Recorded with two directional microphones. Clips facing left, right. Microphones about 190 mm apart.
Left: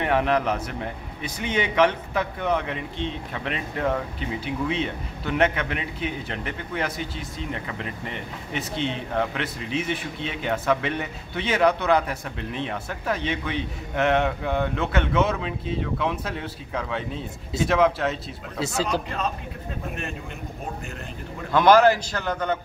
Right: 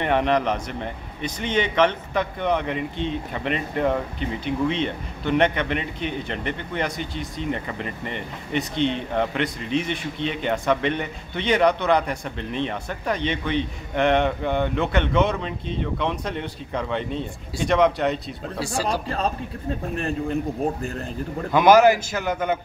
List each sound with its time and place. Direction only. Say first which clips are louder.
0.0 s speech: right 1 dB; 5° left (ahead or behind)
19.0 s a man's voice: right 3 dB; 35° right (ahead or behind)
21.5 s a man's voice: right 2 dB; 10° right (ahead or behind)